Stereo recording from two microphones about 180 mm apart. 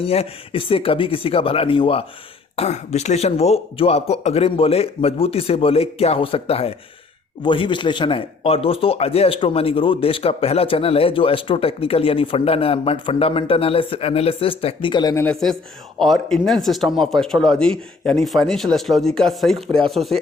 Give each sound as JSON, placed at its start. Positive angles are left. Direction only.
{"t": 0.0, "sound": "a man's voice", "side_deg": 30}
{"t": 15.2, "sound": "speech", "side_deg": 5}